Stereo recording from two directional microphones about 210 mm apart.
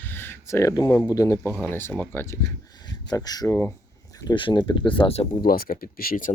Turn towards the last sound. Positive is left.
turn(degrees=40)  # may be behind; listen again after turning